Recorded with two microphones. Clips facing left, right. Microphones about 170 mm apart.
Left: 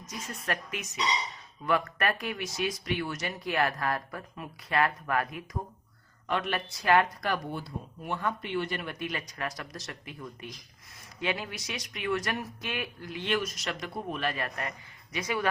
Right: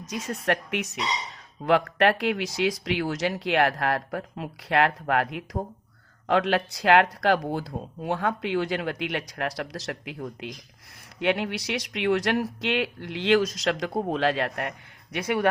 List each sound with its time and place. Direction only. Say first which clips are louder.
0.0 s speech: right 9 dB; 75° right (ahead or behind)
1.6 s speech: right 7 dB; 80° right
2.8 s speech: right 6 dB; 90° right; by 5.6 s 70° right (ahead or behind)
6.2 s speech: right 8 dB; 90° right
11.2 s speech: right 8 dB; 70° right (ahead or behind)